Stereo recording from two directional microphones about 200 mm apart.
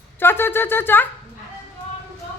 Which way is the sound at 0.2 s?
10° left (ahead or behind).